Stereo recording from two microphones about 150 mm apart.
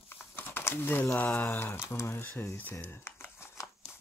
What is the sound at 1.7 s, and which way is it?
Speech, 20° left (ahead or behind).